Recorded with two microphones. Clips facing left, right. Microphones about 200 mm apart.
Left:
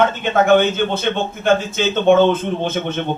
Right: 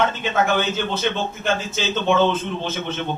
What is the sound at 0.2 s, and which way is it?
A man's voice, 55° left (ahead or behind).